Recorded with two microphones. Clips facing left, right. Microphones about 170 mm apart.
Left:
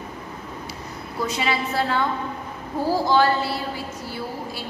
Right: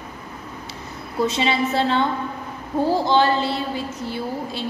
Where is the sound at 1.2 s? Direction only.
25° right (ahead or behind).